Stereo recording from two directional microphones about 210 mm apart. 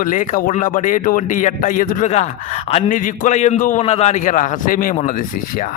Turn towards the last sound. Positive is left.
turn(degrees=40)  # may be behind; listen again after turning